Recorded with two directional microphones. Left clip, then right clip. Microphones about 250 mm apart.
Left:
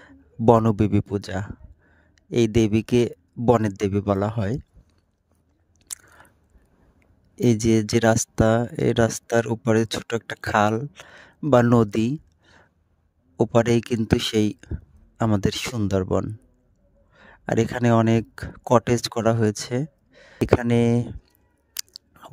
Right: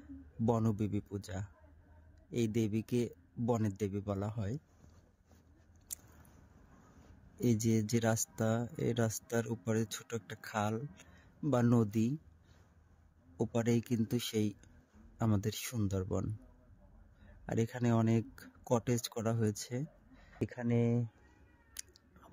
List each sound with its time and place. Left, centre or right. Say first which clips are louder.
0.0 s speech: left 17 dB; left
7.3 s speech: left 14 dB; left
13.4 s speech: left 15 dB; left
21.7 s chewing: left 16 dB; left